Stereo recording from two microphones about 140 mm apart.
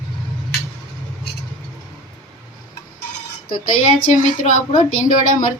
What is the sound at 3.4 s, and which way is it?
A woman's voice, 85° left.